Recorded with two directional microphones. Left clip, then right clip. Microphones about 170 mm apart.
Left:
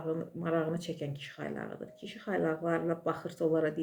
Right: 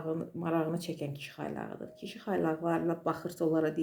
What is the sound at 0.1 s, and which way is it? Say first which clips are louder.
Speech: even; 30° right (ahead or behind).